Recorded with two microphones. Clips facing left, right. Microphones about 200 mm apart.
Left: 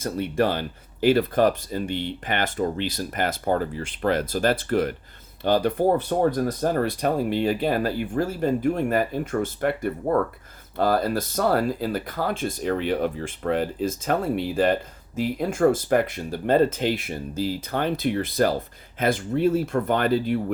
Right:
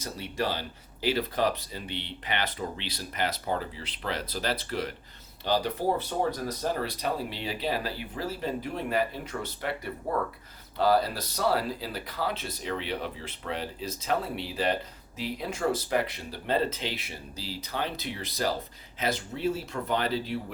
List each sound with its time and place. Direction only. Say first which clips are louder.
0.0 s speech: left 9 dB; 55° left (ahead or behind)